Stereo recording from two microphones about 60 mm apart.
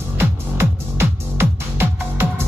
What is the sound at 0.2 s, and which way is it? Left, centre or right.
Music, right.